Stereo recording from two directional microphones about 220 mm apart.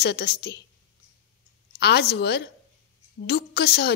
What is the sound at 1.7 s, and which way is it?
A woman's voice, 50° left (ahead or behind).